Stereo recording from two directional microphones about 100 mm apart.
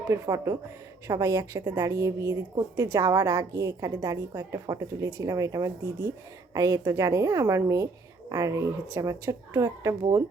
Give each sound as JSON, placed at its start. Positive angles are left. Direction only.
{"t": 0.1, "sound": "a woman's voice", "side_deg": -30}